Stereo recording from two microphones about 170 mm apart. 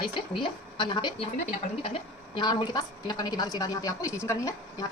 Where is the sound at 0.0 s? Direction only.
30° left (ahead or behind).